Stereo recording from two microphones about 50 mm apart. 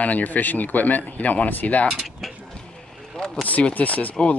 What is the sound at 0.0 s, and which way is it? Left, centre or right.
Speech, left.